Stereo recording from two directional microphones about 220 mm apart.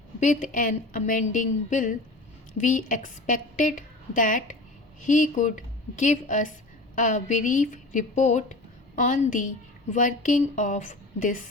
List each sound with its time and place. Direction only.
0.2 s a woman's voice: 35° left (ahead or behind)